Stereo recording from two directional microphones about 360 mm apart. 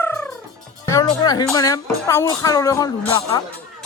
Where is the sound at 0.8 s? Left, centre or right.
Centre.